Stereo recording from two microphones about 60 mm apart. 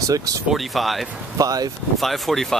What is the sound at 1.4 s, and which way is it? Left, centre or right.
Speech, right.